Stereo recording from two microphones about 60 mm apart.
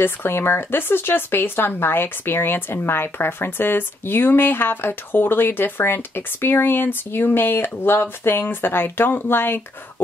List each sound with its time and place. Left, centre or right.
0.0 s speech: left